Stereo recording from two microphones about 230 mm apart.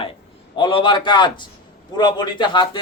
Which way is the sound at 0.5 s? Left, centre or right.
Left.